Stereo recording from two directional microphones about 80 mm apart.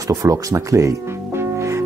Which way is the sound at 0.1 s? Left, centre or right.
Right.